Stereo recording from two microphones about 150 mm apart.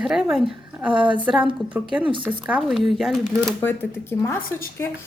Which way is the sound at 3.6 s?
15° left (ahead or behind).